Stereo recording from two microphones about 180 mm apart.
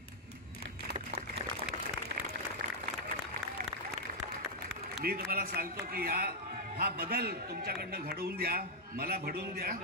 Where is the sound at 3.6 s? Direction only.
50° right (ahead or behind).